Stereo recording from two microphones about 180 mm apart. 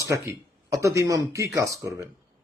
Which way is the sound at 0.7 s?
15° right (ahead or behind).